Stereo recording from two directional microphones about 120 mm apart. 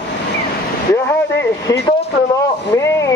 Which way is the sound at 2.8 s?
25° left (ahead or behind).